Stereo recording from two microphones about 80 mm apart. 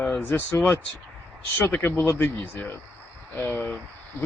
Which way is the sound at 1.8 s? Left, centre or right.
Left.